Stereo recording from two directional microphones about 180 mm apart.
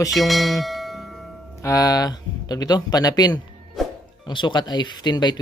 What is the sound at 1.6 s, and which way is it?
Speech, 20° left (ahead or behind).